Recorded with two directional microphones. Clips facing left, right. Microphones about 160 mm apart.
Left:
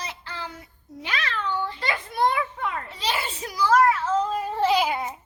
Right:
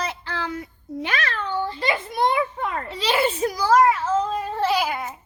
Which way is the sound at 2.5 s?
35° right (ahead or behind).